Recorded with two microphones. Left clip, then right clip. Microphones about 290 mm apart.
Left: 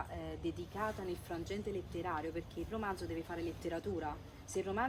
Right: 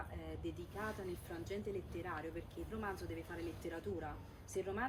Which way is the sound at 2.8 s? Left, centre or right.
Centre.